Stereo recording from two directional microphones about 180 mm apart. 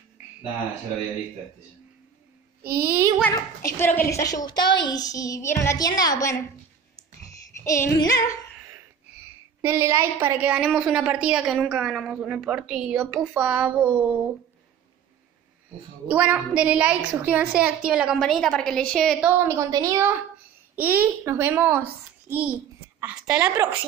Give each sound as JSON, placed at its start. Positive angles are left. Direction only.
{"t": 2.6, "sound": "child singing", "side_deg": -55}
{"t": 2.9, "sound": "a child's voice", "side_deg": -15}
{"t": 3.2, "sound": "a woman's voice", "side_deg": 10}
{"t": 7.5, "sound": "a woman's voice", "side_deg": 15}
{"t": 9.6, "sound": "a woman's voice", "side_deg": -15}
{"t": 16.1, "sound": "a woman's voice", "side_deg": -10}
{"t": 19.4, "sound": "a child's voice", "side_deg": -20}